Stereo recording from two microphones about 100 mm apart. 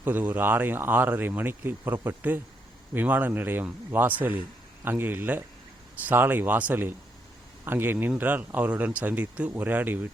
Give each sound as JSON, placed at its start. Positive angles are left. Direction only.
{"t": 0.0, "sound": "speech", "side_deg": -20}